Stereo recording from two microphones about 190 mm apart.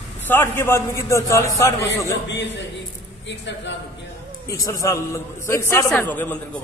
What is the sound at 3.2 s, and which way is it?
Speech, 70° left (ahead or behind).